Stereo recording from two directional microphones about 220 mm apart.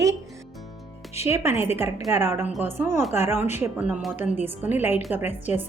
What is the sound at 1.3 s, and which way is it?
A woman's voice, 10° right (ahead or behind).